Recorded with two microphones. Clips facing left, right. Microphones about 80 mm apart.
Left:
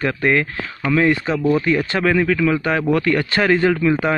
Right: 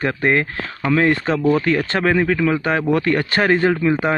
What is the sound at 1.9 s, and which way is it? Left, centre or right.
Speech, right.